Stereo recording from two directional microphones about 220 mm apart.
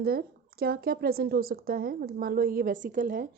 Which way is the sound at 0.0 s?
45° right (ahead or behind).